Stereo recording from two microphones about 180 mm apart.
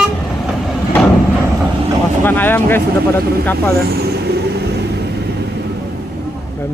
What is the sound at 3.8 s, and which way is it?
Vehicle, 60° right (ahead or behind).